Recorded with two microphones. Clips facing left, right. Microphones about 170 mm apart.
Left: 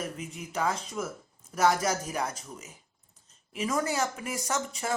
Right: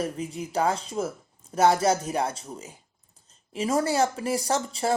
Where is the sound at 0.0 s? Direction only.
35° right (ahead or behind).